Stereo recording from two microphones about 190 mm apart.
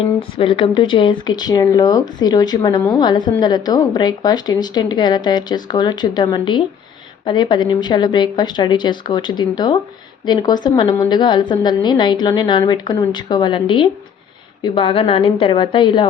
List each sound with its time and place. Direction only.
0.3 s a woman's voice: 25° left (ahead or behind)